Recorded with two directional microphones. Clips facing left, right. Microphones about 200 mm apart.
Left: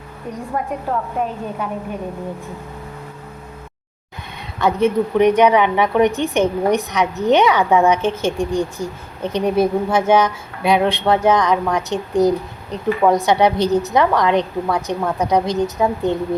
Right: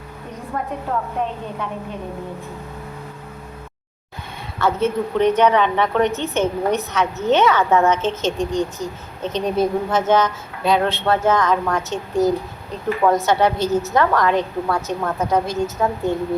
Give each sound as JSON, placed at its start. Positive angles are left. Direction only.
{"t": 0.5, "sound": "a woman's voice", "side_deg": 10}
{"t": 4.6, "sound": "a woman's voice", "side_deg": 15}